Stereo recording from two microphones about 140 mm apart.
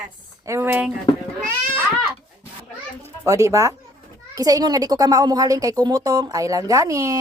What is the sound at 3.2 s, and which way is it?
A woman's voice, 20° right (ahead or behind).